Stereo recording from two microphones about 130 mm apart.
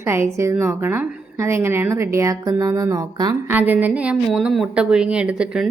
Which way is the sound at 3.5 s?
15° right (ahead or behind).